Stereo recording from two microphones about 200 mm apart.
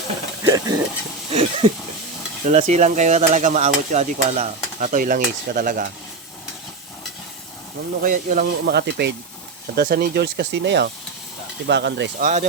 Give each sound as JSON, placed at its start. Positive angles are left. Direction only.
{"t": 0.4, "sound": "speech", "side_deg": -15}
{"t": 1.3, "sound": "speech", "side_deg": -30}
{"t": 8.0, "sound": "speech", "side_deg": -40}
{"t": 8.4, "sound": "speech", "side_deg": -55}
{"t": 12.2, "sound": "speech", "side_deg": -35}